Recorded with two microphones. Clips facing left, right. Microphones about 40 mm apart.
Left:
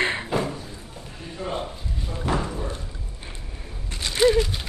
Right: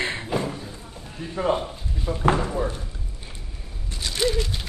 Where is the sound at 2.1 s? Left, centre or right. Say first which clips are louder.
Right 7 dB; right.